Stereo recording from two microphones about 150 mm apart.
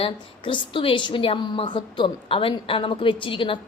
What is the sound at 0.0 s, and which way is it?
A woman's voice, 35° left (ahead or behind).